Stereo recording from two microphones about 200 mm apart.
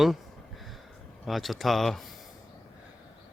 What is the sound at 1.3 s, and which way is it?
Speech, centre (ahead or behind).